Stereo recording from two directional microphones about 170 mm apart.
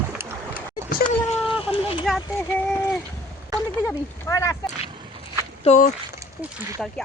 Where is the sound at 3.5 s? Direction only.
20° right (ahead or behind).